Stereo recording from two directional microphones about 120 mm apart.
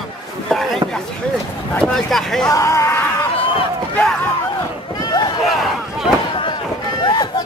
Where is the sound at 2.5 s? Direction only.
25° left (ahead or behind).